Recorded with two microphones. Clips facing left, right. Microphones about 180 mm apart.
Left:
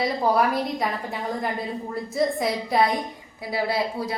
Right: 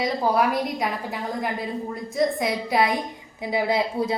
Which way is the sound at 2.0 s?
Centre (ahead or behind).